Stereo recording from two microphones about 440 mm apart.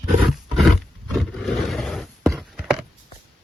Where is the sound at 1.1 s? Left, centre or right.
Centre.